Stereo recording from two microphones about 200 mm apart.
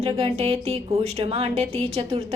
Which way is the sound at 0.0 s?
30° right (ahead or behind).